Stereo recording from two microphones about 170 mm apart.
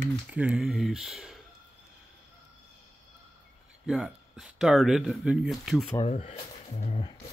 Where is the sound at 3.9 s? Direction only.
5° right (ahead or behind).